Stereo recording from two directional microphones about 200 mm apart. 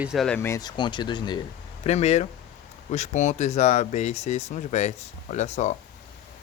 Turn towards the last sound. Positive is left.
turn(degrees=35)  # may be behind; listen again after turning